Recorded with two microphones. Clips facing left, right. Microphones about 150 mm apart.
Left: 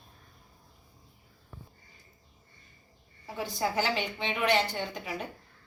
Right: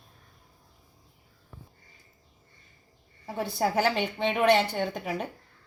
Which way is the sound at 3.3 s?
60° right (ahead or behind).